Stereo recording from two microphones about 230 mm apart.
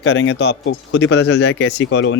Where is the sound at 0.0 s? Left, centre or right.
Left.